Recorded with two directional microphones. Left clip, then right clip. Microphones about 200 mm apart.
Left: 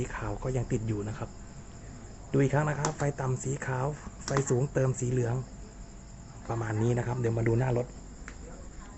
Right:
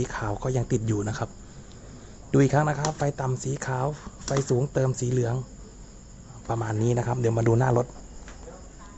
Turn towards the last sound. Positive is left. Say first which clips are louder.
# right 6 dB
turn(degrees=-20)  # may be behind; listen again after turning